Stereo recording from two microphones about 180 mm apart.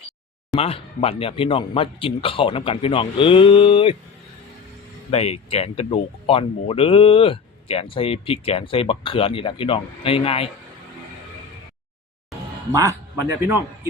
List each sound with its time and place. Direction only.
0.5 s speech: 30° left (ahead or behind)
5.1 s speech: 35° left (ahead or behind)
12.7 s a man's voice: 20° right (ahead or behind)